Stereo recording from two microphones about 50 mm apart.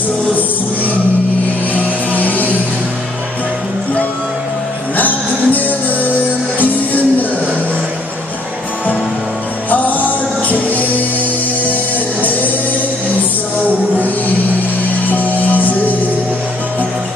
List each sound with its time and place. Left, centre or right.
1.7 s music: left
4.9 s music: left
9.7 s music: left
15.0 s music: left